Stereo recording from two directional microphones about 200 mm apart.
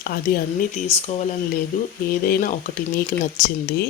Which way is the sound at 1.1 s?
30° left (ahead or behind).